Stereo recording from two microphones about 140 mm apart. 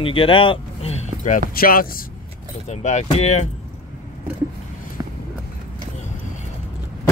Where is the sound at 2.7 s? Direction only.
55° left (ahead or behind).